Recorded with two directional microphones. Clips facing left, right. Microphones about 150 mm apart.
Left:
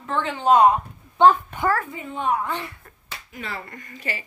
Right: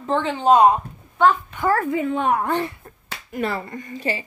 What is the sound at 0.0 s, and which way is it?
Speech, 30° right (ahead or behind).